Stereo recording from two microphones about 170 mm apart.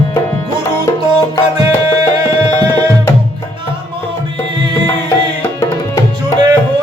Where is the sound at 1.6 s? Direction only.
20° right (ahead or behind).